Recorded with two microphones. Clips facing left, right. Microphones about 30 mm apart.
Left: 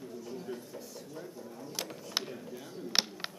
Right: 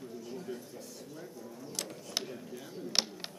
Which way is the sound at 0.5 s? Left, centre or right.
Centre.